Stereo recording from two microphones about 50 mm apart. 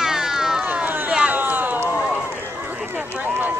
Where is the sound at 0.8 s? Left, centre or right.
Right.